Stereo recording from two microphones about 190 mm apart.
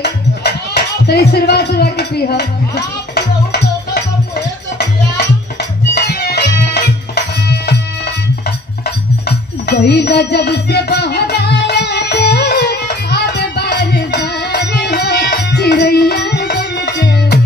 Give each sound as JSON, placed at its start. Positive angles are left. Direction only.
{"t": 0.0, "sound": "music", "side_deg": 60}
{"t": 5.9, "sound": "music", "side_deg": 55}
{"t": 9.7, "sound": "music", "side_deg": 60}